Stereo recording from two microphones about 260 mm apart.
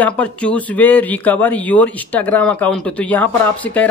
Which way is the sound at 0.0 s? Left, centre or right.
Centre.